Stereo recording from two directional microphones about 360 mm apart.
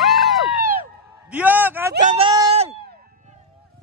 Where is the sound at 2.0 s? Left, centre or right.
Centre.